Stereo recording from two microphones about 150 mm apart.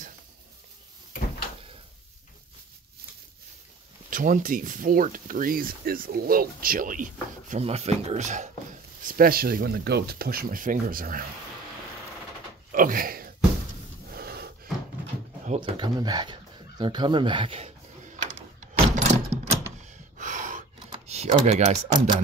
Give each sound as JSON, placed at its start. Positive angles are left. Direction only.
{"t": 4.1, "sound": "speech", "side_deg": -65}
{"t": 7.6, "sound": "speech", "side_deg": -45}
{"t": 12.7, "sound": "speech", "side_deg": -65}
{"t": 14.1, "sound": "wheeze", "side_deg": -90}
{"t": 15.4, "sound": "a sound", "side_deg": -45}
{"t": 15.8, "sound": "a sound", "side_deg": -25}
{"t": 19.8, "sound": "gasp", "side_deg": -60}
{"t": 20.9, "sound": "typing", "side_deg": -45}
{"t": 21.5, "sound": "speech", "side_deg": -50}